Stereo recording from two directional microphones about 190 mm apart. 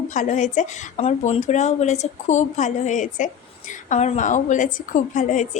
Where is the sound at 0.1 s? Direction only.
40° left (ahead or behind).